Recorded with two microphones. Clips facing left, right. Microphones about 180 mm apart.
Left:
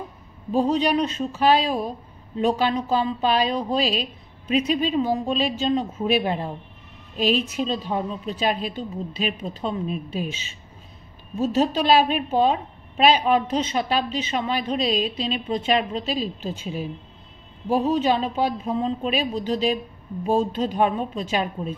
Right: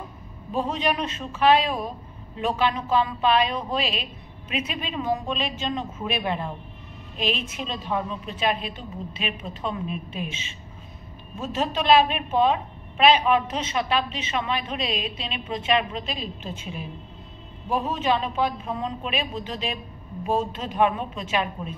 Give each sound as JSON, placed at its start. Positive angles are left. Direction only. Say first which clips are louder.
{"t": 0.5, "sound": "a woman's voice", "louder": "left 5 dB", "side_deg": 35}
{"t": 17.6, "sound": "a woman's voice", "louder": "left 4 dB", "side_deg": 35}